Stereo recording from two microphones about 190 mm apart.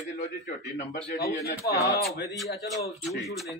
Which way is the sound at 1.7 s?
15° left (ahead or behind).